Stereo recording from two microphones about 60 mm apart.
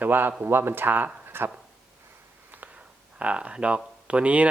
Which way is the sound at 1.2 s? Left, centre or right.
Right.